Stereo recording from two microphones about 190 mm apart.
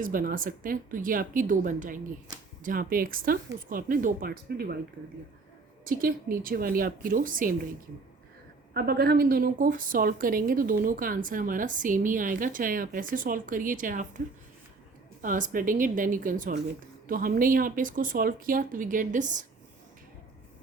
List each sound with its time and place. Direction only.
0.0 s a woman's voice: 45° right (ahead or behind)
5.8 s a woman's voice: 50° right (ahead or behind)
8.7 s a woman's voice: 55° right (ahead or behind)
15.2 s a woman's voice: 45° right (ahead or behind)